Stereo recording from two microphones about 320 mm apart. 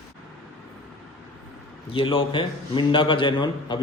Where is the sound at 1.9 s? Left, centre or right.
Centre.